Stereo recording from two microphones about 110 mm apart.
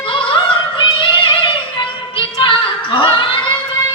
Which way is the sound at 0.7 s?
50° left (ahead or behind).